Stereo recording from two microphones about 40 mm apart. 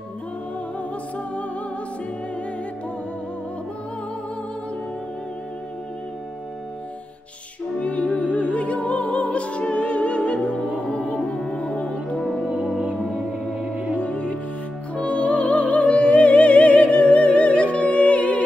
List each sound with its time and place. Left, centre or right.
0.7 s music: left
7.8 s music: left
11.3 s music: centre
12.2 s music: centre
13.9 s music: left